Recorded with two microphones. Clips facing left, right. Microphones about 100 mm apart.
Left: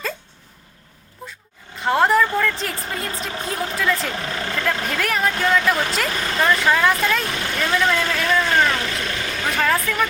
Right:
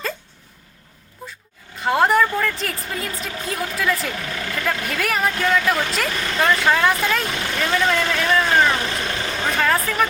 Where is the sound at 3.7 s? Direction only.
5° right (ahead or behind).